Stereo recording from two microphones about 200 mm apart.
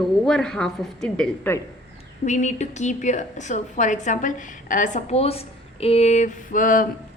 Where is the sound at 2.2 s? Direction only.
35° left (ahead or behind).